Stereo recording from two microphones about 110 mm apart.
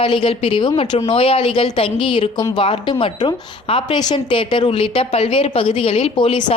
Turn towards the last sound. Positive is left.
turn(degrees=50)  # may be behind; listen again after turning